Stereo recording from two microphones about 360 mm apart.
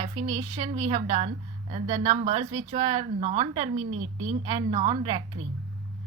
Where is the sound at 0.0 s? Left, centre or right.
Centre.